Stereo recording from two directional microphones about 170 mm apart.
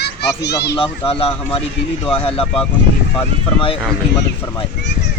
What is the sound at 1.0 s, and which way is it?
Speech, 35° left (ahead or behind).